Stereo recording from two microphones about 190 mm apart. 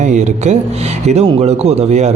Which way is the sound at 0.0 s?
40° right (ahead or behind).